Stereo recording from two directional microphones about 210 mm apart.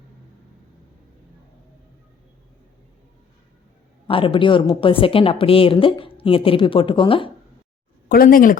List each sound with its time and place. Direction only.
4.0 s a woman's voice: 25° left (ahead or behind)
8.1 s speech: 40° left (ahead or behind)